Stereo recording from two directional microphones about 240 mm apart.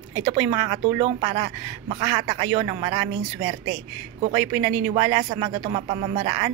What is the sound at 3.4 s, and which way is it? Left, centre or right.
Speech, right.